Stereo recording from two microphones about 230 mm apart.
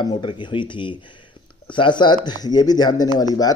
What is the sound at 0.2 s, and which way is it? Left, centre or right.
Speech, left.